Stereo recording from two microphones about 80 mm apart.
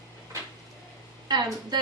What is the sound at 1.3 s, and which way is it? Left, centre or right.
Speech, right.